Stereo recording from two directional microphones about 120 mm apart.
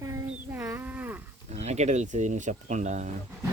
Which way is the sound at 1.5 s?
70° right (ahead or behind).